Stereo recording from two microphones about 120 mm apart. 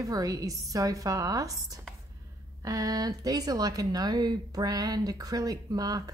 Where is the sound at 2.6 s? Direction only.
30° right (ahead or behind).